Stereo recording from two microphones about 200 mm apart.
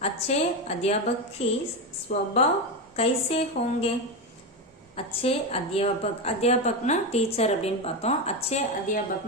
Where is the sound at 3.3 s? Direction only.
30° left (ahead or behind).